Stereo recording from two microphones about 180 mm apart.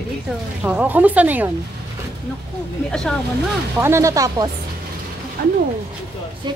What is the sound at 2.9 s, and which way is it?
Speech, 5° left (ahead or behind).